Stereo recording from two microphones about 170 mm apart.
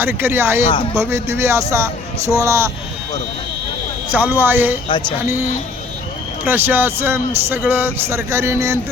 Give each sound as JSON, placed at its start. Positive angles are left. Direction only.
{"t": 0.0, "sound": "a man's voice", "side_deg": -10}
{"t": 4.1, "sound": "a man's voice", "side_deg": -10}
{"t": 4.9, "sound": "speech", "side_deg": 30}
{"t": 6.4, "sound": "a man's voice", "side_deg": -10}